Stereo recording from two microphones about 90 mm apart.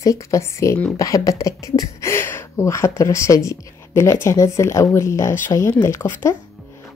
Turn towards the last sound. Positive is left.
turn(degrees=30)  # may be behind; listen again after turning